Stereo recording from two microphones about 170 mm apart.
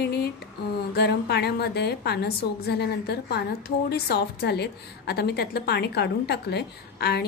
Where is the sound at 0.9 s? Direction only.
75° left (ahead or behind).